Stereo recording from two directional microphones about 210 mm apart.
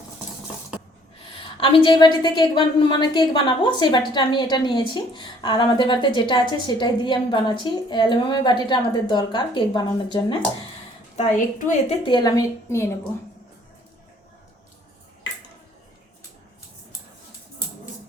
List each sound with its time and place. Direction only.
1.5 s a woman's voice: 25° left (ahead or behind)
11.2 s a woman's voice: 35° left (ahead or behind)
12.0 s a woman's voice: 20° left (ahead or behind)